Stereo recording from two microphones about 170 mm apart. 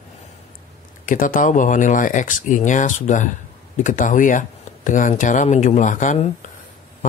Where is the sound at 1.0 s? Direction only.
50° left (ahead or behind).